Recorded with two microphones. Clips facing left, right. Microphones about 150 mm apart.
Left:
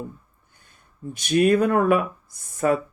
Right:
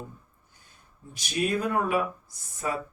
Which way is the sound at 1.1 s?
55° left (ahead or behind).